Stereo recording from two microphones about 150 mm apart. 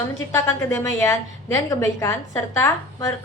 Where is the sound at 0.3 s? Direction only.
15° left (ahead or behind).